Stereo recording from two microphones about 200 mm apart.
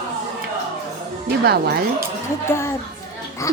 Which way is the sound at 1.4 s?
50° right (ahead or behind).